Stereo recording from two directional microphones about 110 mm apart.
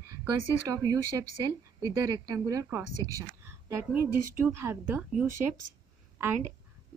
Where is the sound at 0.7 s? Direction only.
35° right (ahead or behind).